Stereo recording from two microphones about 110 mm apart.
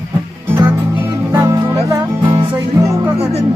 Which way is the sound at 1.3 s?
30° right (ahead or behind).